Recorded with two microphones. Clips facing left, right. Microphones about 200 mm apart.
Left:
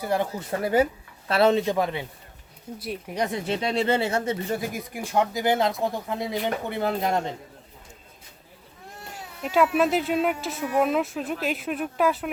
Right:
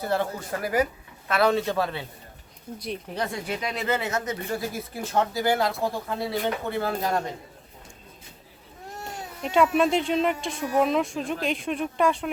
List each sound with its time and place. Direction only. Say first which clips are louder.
0.0 s a man's voice: left 1 dB; 15° left (ahead or behind)
2.7 s speech: left 2 dB; 5° left (ahead or behind); by 7.3 s 20° left (ahead or behind)
9.4 s speech: even; 5° left (ahead or behind)